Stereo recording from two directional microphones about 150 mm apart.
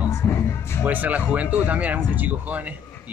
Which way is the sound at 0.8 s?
10° right (ahead or behind).